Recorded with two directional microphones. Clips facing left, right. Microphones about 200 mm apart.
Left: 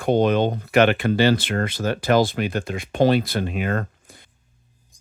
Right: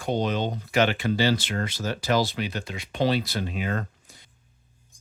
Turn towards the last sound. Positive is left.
turn(degrees=55)  # may be behind; listen again after turning